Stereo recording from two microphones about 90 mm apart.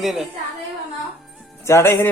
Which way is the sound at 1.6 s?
30° left (ahead or behind).